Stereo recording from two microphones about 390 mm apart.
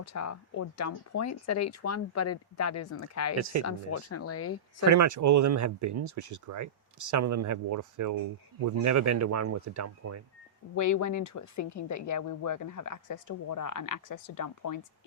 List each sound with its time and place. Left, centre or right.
0.0 s speech: left
3.3 s speech: right
3.6 s speech: left
4.9 s speech: right
10.8 s speech: left